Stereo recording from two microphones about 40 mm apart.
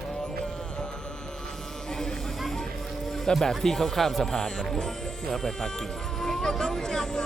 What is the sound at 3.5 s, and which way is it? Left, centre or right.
Speech, centre.